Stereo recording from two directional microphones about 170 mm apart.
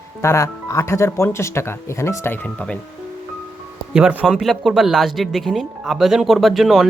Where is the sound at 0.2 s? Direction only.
15° left (ahead or behind).